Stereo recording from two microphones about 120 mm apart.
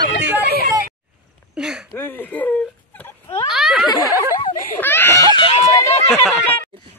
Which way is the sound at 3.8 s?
35° left (ahead or behind).